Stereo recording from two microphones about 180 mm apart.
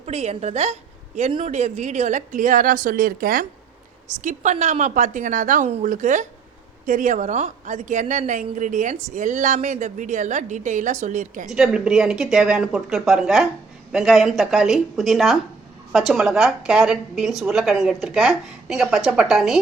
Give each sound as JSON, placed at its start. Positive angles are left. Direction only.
{"t": 0.0, "sound": "a woman's voice", "side_deg": -35}
{"t": 11.4, "sound": "a woman's voice", "side_deg": -5}